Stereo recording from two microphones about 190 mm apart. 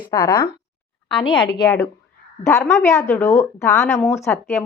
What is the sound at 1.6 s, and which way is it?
A woman's voice, 5° left (ahead or behind).